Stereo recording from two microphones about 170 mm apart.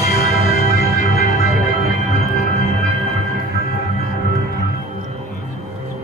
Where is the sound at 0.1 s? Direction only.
65° left (ahead or behind).